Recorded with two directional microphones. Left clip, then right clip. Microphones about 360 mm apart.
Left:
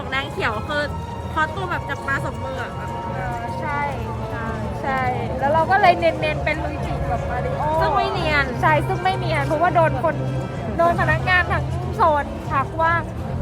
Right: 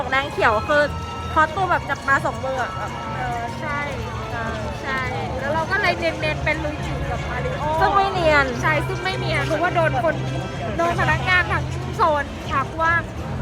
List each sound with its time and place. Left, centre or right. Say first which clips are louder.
0.1 s speech: right 4 dB; centre
5.5 s speech: left 6 dB; centre
7.8 s speech: right 4 dB; centre
8.6 s speech: left 3 dB; centre